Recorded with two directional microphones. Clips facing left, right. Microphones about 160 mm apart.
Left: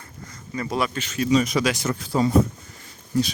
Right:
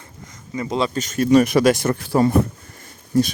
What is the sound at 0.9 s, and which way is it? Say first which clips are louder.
Speech: right 7 dB; 45° right (ahead or behind).